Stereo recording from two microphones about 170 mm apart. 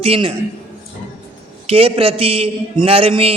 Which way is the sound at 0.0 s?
30° right (ahead or behind).